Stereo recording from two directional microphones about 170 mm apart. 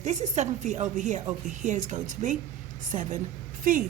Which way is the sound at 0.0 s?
45° right (ahead or behind).